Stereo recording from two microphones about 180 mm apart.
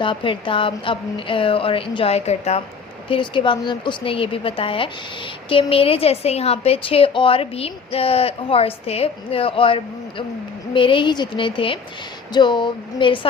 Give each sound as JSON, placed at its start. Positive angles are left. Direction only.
{"t": 0.0, "sound": "a woman's voice", "side_deg": 25}